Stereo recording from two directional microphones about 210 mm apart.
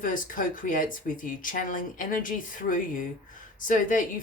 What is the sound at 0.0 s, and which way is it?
Speech, 40° left (ahead or behind).